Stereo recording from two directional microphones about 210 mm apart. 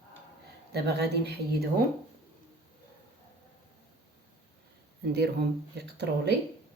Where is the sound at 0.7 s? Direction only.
50° right (ahead or behind).